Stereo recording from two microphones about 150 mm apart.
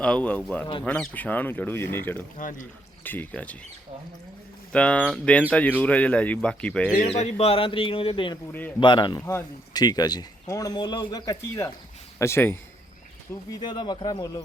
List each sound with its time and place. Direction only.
0.0 s speech: 5° left (ahead or behind)
2.4 s speech: 60° left (ahead or behind)
3.0 s speech: 10° left (ahead or behind)
4.7 s speech: 10° left (ahead or behind)
7.0 s a man's voice: 50° left (ahead or behind); by 12.5 s 15° left (ahead or behind)
13.5 s speech: 30° left (ahead or behind)